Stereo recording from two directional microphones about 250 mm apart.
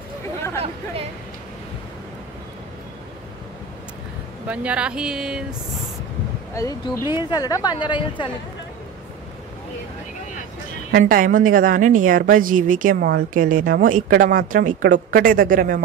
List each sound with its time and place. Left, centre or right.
4.5 s speech: centre
6.5 s a woman's voice: centre
10.9 s a woman's voice: right